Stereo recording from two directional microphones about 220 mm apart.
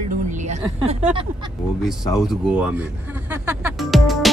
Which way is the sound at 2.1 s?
Centre (ahead or behind).